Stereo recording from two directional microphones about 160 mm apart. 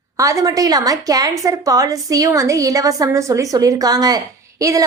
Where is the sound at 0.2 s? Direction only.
20° right (ahead or behind).